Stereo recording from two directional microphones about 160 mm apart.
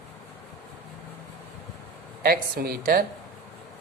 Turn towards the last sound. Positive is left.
turn(degrees=-70)  # may be behind; listen again after turning